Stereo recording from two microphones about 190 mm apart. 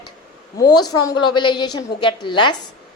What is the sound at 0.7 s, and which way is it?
A woman's voice, 20° left (ahead or behind).